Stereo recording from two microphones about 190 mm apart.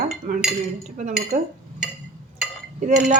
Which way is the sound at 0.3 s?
40° right (ahead or behind).